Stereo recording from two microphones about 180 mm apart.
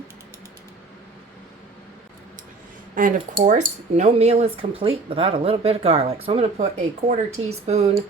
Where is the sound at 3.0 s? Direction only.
45° right (ahead or behind).